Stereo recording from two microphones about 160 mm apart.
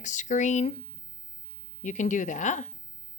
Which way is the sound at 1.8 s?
50° left (ahead or behind).